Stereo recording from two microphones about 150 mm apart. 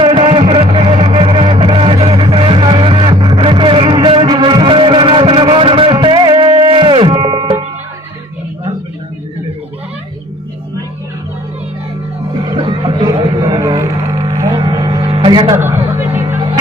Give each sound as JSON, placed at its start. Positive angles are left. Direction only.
{"t": 0.0, "sound": "music", "side_deg": -35}
{"t": 12.5, "sound": "a sound", "side_deg": -30}
{"t": 15.5, "sound": "music", "side_deg": -15}